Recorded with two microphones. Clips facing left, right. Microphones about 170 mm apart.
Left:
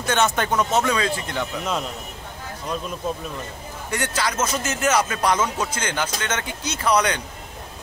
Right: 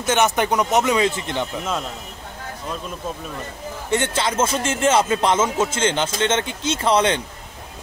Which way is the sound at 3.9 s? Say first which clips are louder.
Right 4 dB; 25° right (ahead or behind).